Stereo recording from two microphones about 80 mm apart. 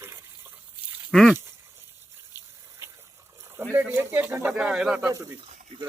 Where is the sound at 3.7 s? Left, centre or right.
Right.